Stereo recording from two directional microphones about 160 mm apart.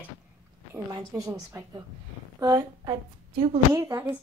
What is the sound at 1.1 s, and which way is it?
A woman's voice, 20° right (ahead or behind).